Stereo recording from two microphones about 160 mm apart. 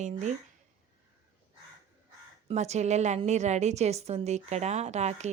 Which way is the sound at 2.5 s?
45° right (ahead or behind).